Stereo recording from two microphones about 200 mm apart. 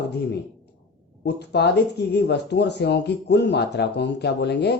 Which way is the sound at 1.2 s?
55° left (ahead or behind).